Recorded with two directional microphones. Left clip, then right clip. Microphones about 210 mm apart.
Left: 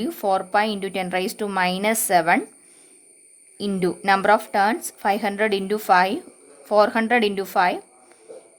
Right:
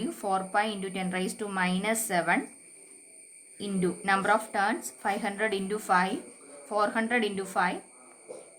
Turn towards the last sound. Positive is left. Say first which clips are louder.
# left 8 dB
turn(degrees=40)  # may be behind; listen again after turning